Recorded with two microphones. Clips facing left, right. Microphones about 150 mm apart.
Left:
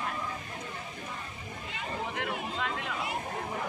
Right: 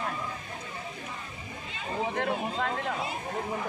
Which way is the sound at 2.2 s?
55° right (ahead or behind).